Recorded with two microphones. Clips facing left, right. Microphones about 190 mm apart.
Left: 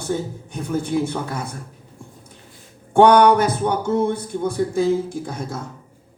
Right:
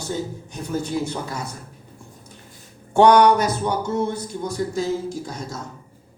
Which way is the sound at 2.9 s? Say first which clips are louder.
Left 1 dB; 55° left (ahead or behind).